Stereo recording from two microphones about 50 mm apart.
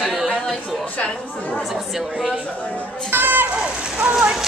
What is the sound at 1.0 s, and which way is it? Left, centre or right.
Speech, left.